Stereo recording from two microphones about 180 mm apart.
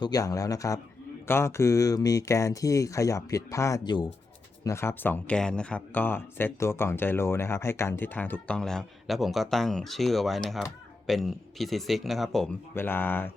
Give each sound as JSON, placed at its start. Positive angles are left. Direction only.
{"t": 0.0, "sound": "speech", "side_deg": 20}
{"t": 12.7, "sound": "speech", "side_deg": 10}